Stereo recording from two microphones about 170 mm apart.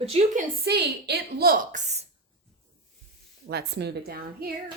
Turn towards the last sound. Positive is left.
turn(degrees=-65)  # may be behind; listen again after turning